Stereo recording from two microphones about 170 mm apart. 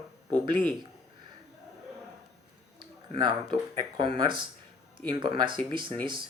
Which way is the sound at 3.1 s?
30° right (ahead or behind).